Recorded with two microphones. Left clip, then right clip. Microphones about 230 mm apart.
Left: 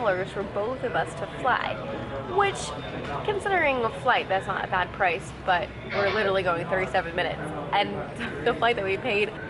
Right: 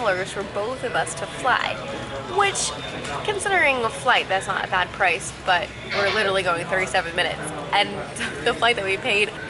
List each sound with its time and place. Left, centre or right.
0.0 s speech: centre
0.3 s speech: left
0.9 s speech: centre
3.1 s speech: centre